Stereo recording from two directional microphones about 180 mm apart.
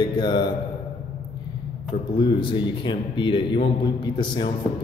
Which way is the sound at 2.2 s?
25° left (ahead or behind).